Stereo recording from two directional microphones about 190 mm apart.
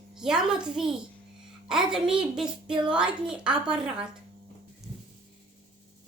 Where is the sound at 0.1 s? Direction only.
5° right (ahead or behind).